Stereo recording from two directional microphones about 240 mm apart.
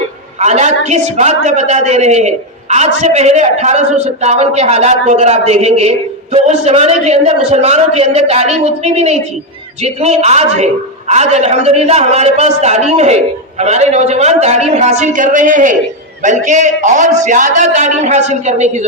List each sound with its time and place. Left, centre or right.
0.3 s a woman's voice: right